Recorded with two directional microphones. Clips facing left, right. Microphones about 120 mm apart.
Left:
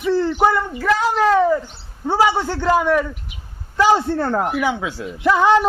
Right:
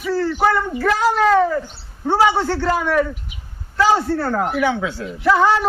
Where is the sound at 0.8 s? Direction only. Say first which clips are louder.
Right 1 dB; 10° left (ahead or behind).